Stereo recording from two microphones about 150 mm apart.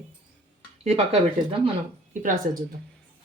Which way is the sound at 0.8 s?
45° right (ahead or behind).